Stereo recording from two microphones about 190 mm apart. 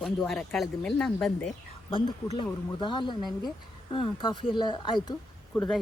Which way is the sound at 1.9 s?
25° left (ahead or behind).